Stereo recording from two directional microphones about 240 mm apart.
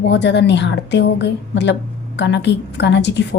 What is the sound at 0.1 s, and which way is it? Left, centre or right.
A woman's voice, left.